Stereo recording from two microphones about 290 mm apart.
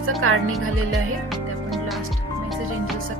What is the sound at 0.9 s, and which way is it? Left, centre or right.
Music, centre.